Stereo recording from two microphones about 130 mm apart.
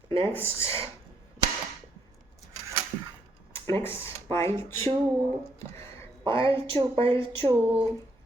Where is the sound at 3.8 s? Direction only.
20° left (ahead or behind).